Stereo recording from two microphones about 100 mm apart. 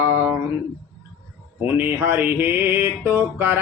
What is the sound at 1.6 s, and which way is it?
Mantra, 25° right (ahead or behind).